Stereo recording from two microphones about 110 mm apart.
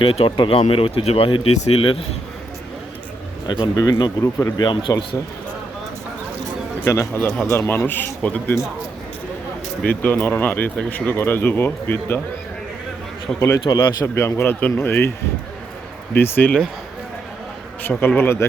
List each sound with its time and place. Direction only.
0.0 s speech: 55° left (ahead or behind); by 1.8 s 75° left (ahead or behind)
3.4 s speech: 40° left (ahead or behind)
4.6 s speech: 45° left (ahead or behind)
6.8 s speech: 25° left (ahead or behind)
9.8 s speech: 15° left (ahead or behind)
13.7 s speech: 25° left (ahead or behind)
16.1 s speech: 20° left (ahead or behind)
17.8 s speech: 20° left (ahead or behind)